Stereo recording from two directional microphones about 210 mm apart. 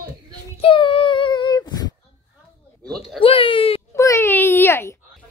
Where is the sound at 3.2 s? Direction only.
25° left (ahead or behind).